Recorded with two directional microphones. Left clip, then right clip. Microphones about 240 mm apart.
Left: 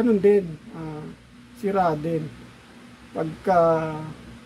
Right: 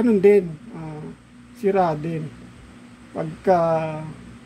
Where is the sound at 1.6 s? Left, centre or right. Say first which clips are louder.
Right 3 dB; right.